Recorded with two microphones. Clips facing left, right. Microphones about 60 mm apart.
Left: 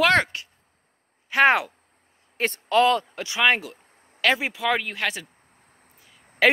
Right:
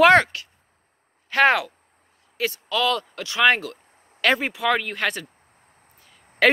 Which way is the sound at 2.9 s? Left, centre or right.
Left.